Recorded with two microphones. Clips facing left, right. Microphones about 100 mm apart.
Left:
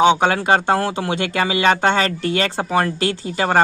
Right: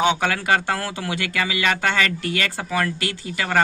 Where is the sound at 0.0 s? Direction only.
25° left (ahead or behind).